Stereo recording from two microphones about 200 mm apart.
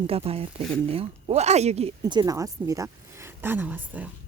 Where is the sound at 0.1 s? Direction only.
30° right (ahead or behind); by 4.1 s 10° right (ahead or behind).